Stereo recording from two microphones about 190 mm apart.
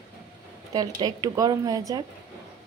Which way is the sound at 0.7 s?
20° right (ahead or behind).